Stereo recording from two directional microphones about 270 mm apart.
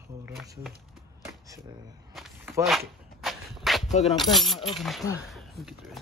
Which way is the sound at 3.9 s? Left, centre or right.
Left.